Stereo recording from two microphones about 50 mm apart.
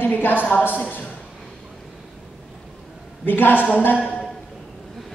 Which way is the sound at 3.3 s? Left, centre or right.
Left.